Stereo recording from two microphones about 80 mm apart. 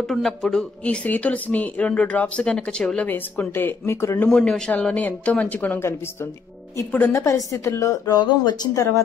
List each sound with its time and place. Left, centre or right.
0.1 s speech: centre
1.0 s speech: centre
3.1 s speech: left
4.3 s speech: centre
6.9 s speech: left
7.2 s a woman's voice: left
8.1 s speech: left